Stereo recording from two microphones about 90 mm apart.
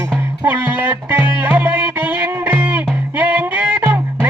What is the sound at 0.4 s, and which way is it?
Music, 20° right (ahead or behind).